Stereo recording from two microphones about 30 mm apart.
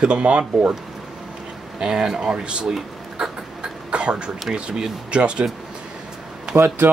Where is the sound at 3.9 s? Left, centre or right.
Right.